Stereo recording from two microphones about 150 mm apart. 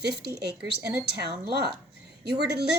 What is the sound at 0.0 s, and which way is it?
Speech, 90° right.